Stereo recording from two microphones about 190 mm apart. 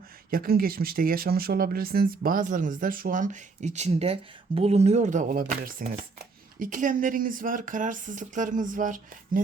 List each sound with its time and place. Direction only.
0.3 s speech: 50° right (ahead or behind)